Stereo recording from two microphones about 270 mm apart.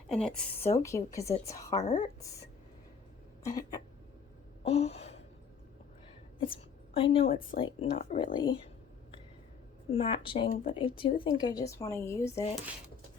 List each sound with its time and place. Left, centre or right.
0.1 s speech: centre
1.7 s speech: left
3.4 s speech: centre
4.6 s gasp: left
6.4 s a woman's voice: centre
9.9 s speech: centre
12.3 s speech: left